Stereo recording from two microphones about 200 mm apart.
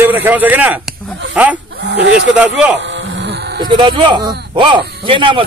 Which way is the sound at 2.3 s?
5° right (ahead or behind).